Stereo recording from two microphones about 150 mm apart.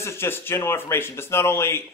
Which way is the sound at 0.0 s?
15° left (ahead or behind).